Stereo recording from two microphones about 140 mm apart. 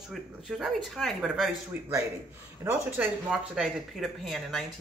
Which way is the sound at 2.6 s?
20° right (ahead or behind).